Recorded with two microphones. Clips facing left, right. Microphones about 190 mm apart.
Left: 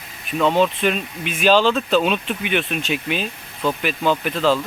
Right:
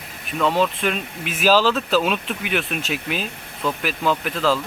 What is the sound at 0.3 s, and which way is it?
Speech, centre (ahead or behind).